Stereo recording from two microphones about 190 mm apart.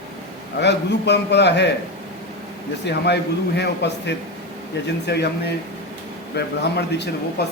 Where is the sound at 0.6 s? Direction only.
65° left (ahead or behind).